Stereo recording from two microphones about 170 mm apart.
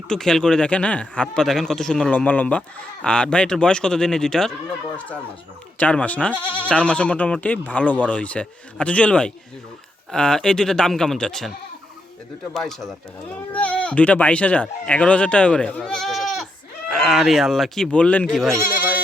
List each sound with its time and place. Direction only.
0.1 s a man's voice: 5° left (ahead or behind)
5.7 s speech: 5° left (ahead or behind)
6.3 s speech: 10° right (ahead or behind)
6.7 s a man's voice: 5° left (ahead or behind)
12.5 s a man's voice: centre (ahead or behind)